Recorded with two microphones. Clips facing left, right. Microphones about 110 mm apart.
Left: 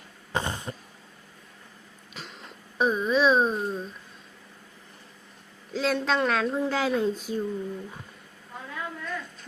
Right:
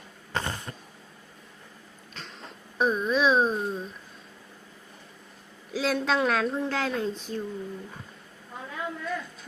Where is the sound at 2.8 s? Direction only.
Centre (ahead or behind).